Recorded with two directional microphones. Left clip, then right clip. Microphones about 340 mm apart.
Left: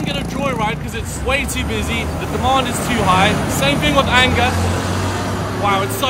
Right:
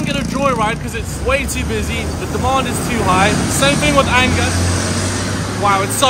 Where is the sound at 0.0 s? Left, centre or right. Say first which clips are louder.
Right 4 dB; centre.